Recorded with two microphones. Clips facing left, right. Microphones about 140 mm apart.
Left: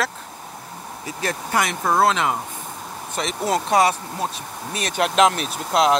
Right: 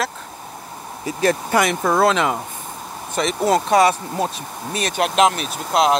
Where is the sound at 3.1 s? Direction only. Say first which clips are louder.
Right 5 dB; 50° right (ahead or behind).